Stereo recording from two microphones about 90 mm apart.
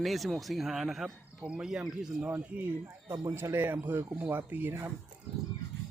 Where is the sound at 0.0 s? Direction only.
Centre (ahead or behind).